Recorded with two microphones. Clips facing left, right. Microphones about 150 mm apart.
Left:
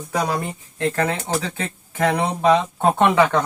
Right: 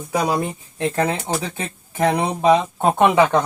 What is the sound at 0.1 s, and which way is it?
Speech, 15° right (ahead or behind).